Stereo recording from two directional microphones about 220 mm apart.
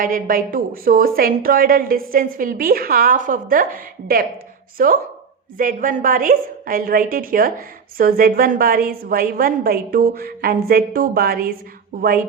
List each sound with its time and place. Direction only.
0.0 s a woman's voice: 40° right (ahead or behind)